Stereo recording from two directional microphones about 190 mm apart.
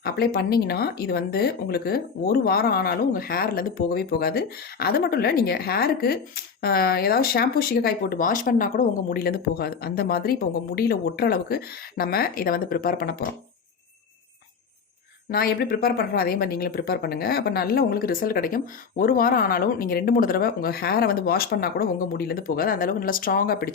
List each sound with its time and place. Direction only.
0.0 s speech: 55° left (ahead or behind)
15.3 s speech: 50° left (ahead or behind)